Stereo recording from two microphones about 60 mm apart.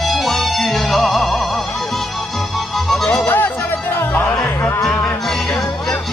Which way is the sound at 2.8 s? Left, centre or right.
Centre.